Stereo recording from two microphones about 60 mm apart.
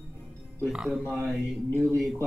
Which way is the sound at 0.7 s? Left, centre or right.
Centre.